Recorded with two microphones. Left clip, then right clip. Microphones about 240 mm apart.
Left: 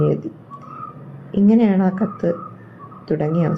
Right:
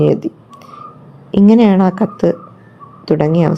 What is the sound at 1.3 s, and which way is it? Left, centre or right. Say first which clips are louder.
A woman's voice: right 6 dB; right.